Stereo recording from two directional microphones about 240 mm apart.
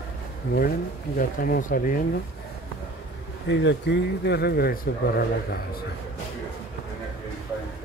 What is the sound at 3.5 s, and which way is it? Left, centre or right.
Speech, left.